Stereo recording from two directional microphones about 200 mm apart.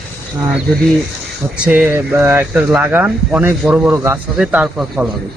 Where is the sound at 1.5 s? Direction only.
5° right (ahead or behind).